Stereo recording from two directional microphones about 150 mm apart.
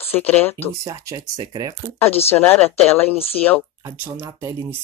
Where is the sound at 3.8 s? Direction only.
20° right (ahead or behind).